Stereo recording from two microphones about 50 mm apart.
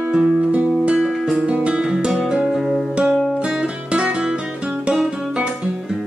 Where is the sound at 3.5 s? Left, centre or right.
Centre.